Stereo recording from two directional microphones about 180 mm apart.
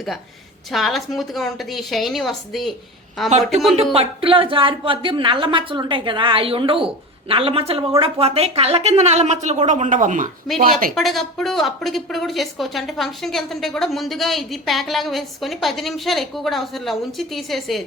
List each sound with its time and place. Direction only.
0.7 s speech: centre (ahead or behind)
3.2 s a woman's voice: 40° right (ahead or behind)
10.9 s speech: centre (ahead or behind)